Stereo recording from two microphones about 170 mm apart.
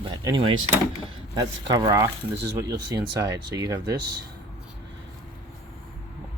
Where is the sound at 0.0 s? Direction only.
25° right (ahead or behind).